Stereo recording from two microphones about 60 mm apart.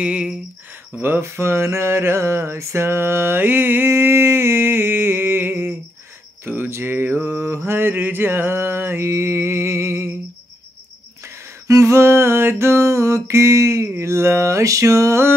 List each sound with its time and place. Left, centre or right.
0.0 s speech: right
1.2 s mantra: right
6.4 s speech: right
6.7 s mantra: right
11.2 s a sound: right